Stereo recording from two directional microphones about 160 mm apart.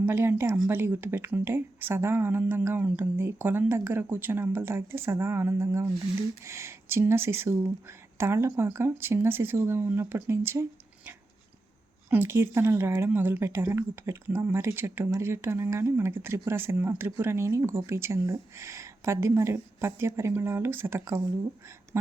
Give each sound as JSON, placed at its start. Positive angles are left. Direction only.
{"t": 0.0, "sound": "speech", "side_deg": -15}
{"t": 12.1, "sound": "speech", "side_deg": -15}